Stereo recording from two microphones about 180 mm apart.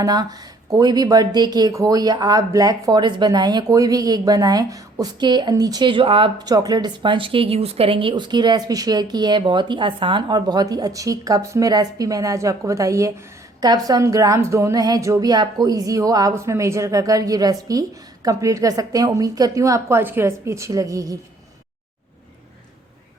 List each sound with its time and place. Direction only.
0.0 s speech: 20° right (ahead or behind)